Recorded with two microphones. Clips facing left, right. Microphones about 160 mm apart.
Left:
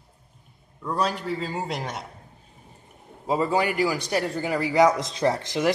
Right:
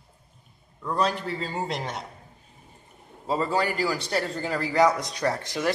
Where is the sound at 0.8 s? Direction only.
5° left (ahead or behind).